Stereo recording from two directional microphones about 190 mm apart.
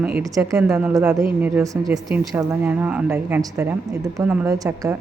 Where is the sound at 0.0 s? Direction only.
10° right (ahead or behind).